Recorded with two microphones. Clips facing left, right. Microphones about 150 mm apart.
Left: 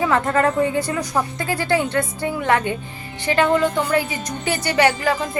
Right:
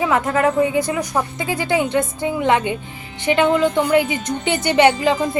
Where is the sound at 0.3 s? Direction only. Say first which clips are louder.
Right 1 dB; 10° right (ahead or behind).